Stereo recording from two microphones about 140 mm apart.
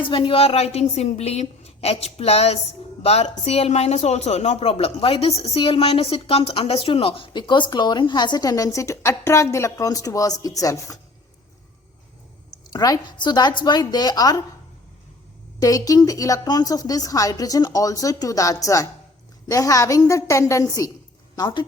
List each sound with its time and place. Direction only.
0.0 s a woman's voice: 40° left (ahead or behind)
12.7 s a woman's voice: 25° left (ahead or behind)
15.6 s a woman's voice: 25° left (ahead or behind)